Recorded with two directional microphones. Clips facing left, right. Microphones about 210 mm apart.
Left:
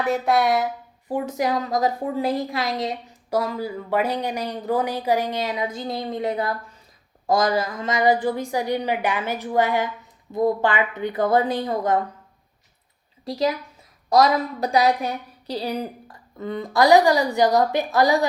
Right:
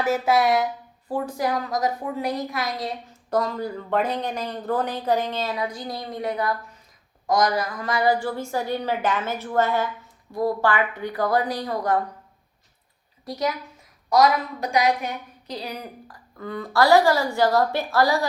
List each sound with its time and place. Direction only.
0.0 s speech: centre (ahead or behind)
1.0 s a woman's voice: 20° left (ahead or behind)
3.2 s a woman's voice: 10° left (ahead or behind); by 11.9 s 25° left (ahead or behind)
13.2 s a woman's voice: 25° left (ahead or behind)